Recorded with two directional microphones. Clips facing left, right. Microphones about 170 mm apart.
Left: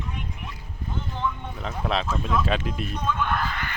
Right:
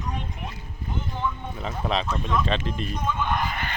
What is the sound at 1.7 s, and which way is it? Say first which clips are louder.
Speech: even; centre (ahead or behind).